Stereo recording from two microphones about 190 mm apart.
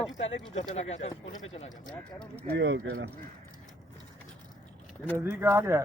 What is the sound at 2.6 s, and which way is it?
Speech, 60° right (ahead or behind).